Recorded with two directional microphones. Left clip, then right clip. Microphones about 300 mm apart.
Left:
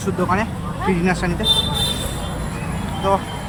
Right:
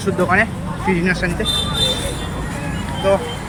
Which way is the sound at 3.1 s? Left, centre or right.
Centre.